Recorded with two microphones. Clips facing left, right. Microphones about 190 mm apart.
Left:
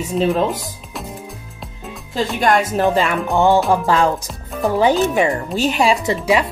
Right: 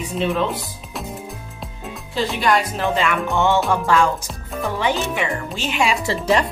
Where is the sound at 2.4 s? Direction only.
45° left (ahead or behind).